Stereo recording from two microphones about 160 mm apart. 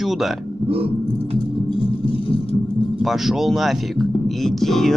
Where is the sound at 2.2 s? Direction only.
35° left (ahead or behind).